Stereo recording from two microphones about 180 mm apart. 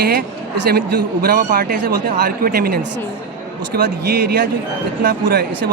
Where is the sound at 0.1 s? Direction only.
60° right (ahead or behind).